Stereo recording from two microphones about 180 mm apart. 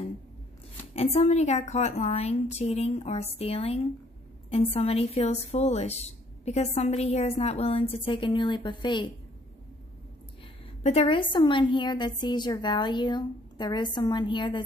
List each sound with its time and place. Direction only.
0.9 s a woman's voice: 35° left (ahead or behind)
10.8 s a woman's voice: 35° left (ahead or behind)